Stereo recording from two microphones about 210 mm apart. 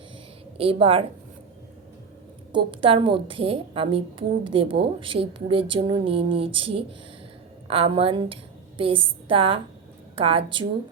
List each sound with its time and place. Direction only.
0.5 s a woman's voice: 25° right (ahead or behind)
2.5 s a woman's voice: 25° right (ahead or behind)